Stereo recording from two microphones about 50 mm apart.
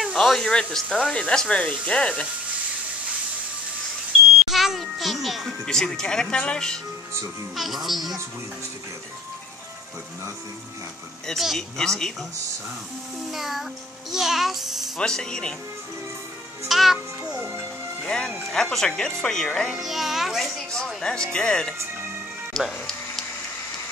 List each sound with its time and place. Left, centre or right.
0.0 s a sound: centre
0.5 s speech: centre
4.4 s a child's voice: centre
5.7 s speech: centre
7.5 s a child's voice: centre
11.3 s speech: centre
13.3 s a child's voice: centre
15.0 s speech: centre
16.6 s a child's voice: centre
17.4 s music: right
18.0 s speech: centre
19.7 s a child's voice: centre
20.7 s speech: centre
22.5 s a child's voice: centre